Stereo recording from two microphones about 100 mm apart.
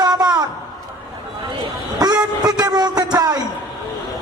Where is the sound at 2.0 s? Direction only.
40° right (ahead or behind).